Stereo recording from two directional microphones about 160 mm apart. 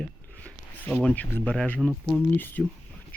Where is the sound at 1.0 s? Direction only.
10° left (ahead or behind).